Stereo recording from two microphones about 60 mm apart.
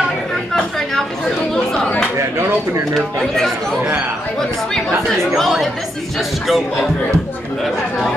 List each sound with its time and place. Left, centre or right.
1.5 s chatter: centre
2.1 s speech: right
2.9 s speech: centre
5.4 s speech: centre